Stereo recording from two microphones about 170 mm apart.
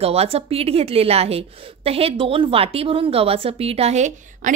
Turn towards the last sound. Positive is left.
turn(degrees=-45)  # may be behind; listen again after turning